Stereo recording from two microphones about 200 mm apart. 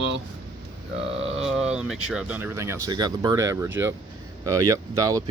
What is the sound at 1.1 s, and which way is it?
Speech, 30° right (ahead or behind).